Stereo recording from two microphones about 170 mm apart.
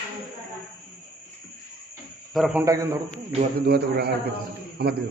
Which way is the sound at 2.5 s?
20° right (ahead or behind).